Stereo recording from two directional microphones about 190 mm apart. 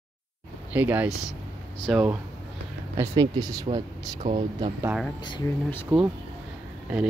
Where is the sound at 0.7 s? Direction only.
10° right (ahead or behind).